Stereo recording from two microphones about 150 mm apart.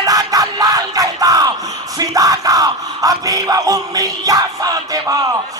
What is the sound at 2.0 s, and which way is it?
Yell, 25° right (ahead or behind).